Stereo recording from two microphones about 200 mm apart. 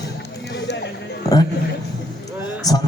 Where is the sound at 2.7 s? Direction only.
20° left (ahead or behind).